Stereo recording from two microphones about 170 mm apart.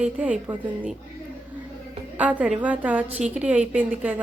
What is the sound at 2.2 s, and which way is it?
A woman's voice, 10° right (ahead or behind).